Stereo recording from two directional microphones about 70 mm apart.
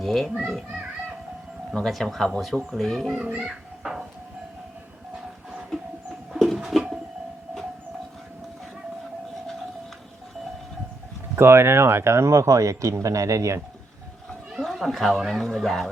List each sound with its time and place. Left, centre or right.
0.0 s a child's voice: centre
1.7 s speech: centre
3.2 s children playing: centre
5.1 s train: centre
6.3 s bird: centre
11.3 s speech: right
14.6 s speech: centre